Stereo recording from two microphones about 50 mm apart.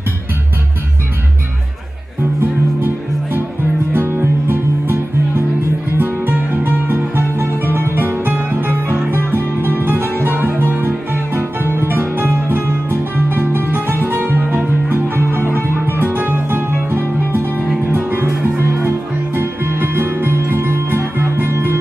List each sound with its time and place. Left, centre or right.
3.9 s music: right
16.0 s music: right